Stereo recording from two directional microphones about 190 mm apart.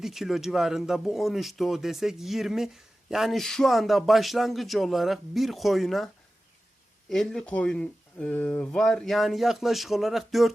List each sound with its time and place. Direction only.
0.0 s speech: centre (ahead or behind)
7.1 s speech: 5° left (ahead or behind)